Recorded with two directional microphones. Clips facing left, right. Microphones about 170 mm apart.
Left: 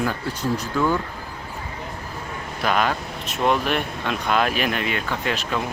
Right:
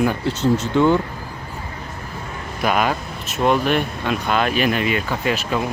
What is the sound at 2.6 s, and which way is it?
Speech, 10° right (ahead or behind).